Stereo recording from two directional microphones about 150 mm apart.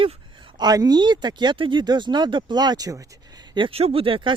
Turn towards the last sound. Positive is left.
turn(degrees=-35)  # may be behind; listen again after turning